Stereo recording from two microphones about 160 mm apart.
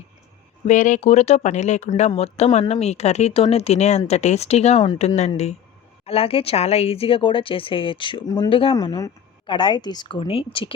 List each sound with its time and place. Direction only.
0.7 s speech: 50° left (ahead or behind); by 8.7 s 35° left (ahead or behind)
8.7 s speech: 20° left (ahead or behind)